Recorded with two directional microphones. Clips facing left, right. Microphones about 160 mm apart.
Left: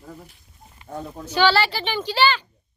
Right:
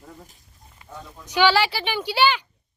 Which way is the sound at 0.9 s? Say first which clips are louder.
Left 7 dB; 35° left (ahead or behind).